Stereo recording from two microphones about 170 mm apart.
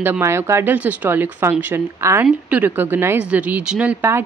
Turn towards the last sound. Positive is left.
turn(degrees=-10)  # may be behind; listen again after turning